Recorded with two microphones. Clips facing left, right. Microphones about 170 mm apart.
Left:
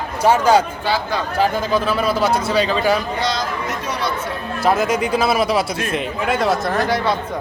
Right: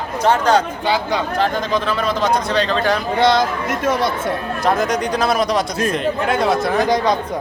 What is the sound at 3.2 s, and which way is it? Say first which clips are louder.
Speech: right 6 dB; 50° right (ahead or behind).